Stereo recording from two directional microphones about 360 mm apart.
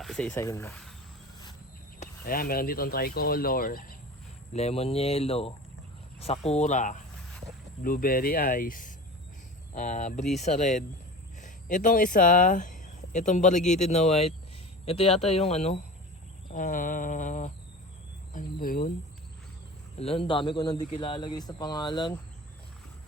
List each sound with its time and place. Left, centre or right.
0.0 s speech: centre
2.0 s speech: left
16.5 s a sound: left
20.0 s speech: centre